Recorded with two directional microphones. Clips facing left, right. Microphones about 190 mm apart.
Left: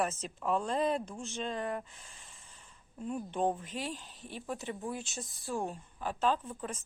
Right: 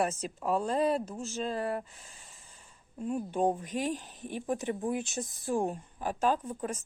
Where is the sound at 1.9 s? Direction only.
5° right (ahead or behind).